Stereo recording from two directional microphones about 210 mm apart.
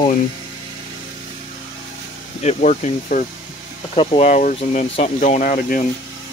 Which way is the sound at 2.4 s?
35° left (ahead or behind).